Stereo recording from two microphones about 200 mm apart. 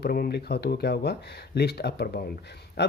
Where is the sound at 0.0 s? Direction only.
50° left (ahead or behind).